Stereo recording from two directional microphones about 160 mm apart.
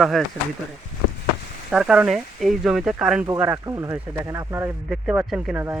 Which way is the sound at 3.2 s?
15° right (ahead or behind).